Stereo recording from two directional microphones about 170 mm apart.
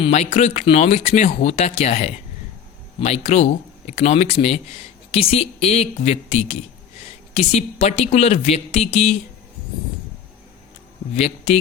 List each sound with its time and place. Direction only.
0.0 s speech: 40° left (ahead or behind)